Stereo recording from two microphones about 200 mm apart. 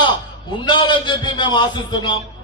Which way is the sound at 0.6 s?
25° left (ahead or behind).